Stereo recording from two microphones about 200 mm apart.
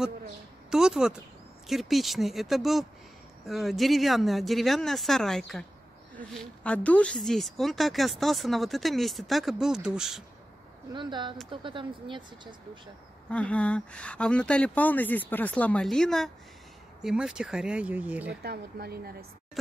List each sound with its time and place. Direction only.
0.7 s speech: 5° right (ahead or behind)
10.9 s speech: 20° right (ahead or behind)
13.3 s speech: 5° left (ahead or behind)
18.4 s speech: 50° right (ahead or behind)